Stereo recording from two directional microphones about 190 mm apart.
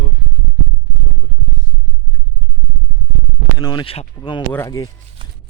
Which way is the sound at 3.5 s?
25° left (ahead or behind).